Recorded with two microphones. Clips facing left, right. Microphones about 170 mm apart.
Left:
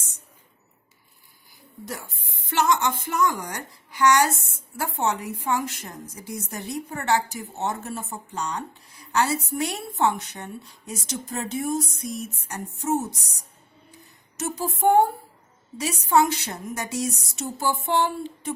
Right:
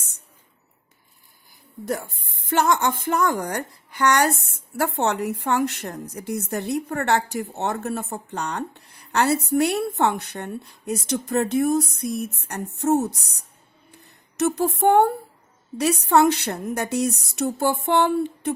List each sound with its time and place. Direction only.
1.8 s a woman's voice: 55° right (ahead or behind)
14.3 s a woman's voice: 65° right (ahead or behind)